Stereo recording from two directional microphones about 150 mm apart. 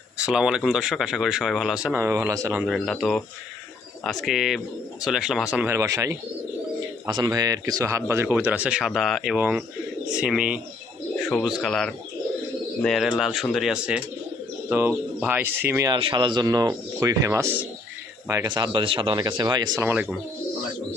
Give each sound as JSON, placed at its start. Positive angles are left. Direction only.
{"t": 0.2, "sound": "speech", "side_deg": -5}
{"t": 2.6, "sound": "speech", "side_deg": 0}
{"t": 15.9, "sound": "speech", "side_deg": -35}
{"t": 19.8, "sound": "speech", "side_deg": -10}